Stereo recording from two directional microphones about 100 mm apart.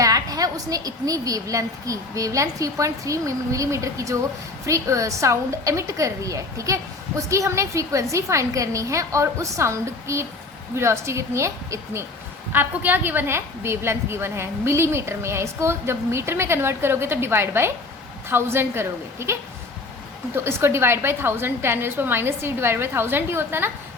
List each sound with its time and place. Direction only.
0.0 s a woman's voice: 35° right (ahead or behind)
12.5 s a woman's voice: 20° right (ahead or behind)